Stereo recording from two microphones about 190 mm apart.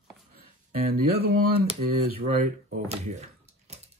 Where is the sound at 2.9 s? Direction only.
35° right (ahead or behind).